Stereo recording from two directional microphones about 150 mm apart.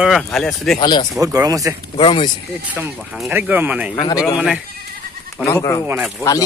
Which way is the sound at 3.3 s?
10° right (ahead or behind).